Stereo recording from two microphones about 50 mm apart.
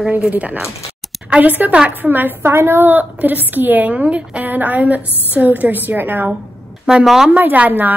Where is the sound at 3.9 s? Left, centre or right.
Right.